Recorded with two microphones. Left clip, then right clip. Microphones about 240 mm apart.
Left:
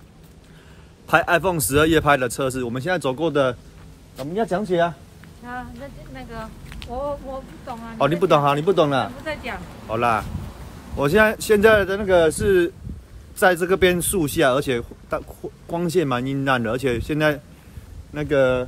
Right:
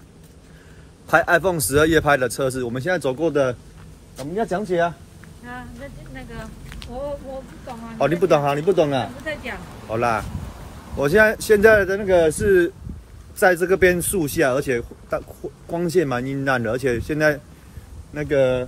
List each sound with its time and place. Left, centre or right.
1.0 s a man's voice: centre
8.0 s speech: centre